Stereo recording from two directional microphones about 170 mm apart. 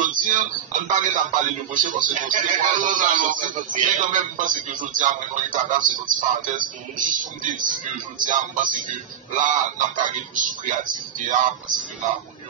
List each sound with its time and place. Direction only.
0.0 s music: 50° right (ahead or behind)
0.9 s speech: 50° right (ahead or behind)